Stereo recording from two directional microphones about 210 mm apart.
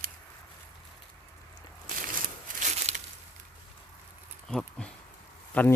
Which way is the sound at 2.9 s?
30° right (ahead or behind).